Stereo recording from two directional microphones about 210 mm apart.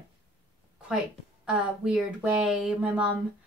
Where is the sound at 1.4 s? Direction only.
5° right (ahead or behind).